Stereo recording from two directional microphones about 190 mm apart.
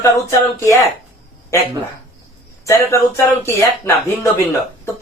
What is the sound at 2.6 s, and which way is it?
Speech, 15° left (ahead or behind).